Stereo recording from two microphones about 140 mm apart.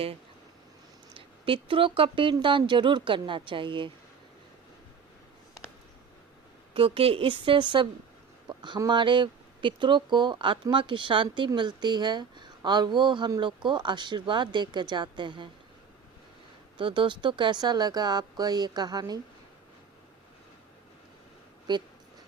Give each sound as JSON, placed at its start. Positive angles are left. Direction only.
{"t": 1.1, "sound": "a woman's voice", "side_deg": -40}
{"t": 6.7, "sound": "speech", "side_deg": -40}
{"t": 16.7, "sound": "speech", "side_deg": -35}